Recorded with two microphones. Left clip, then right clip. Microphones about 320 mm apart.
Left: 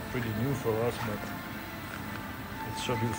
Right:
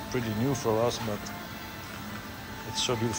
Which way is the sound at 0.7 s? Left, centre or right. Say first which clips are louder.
Right 3 dB; centre.